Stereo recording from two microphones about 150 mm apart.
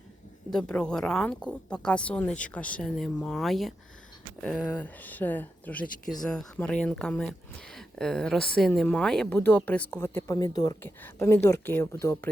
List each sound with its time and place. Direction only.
0.5 s speech: 5° left (ahead or behind); by 10.8 s 25° left (ahead or behind)
10.8 s speech: 15° left (ahead or behind)